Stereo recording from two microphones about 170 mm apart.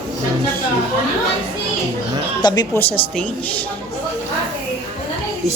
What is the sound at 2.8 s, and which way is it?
Speech, 10° left (ahead or behind).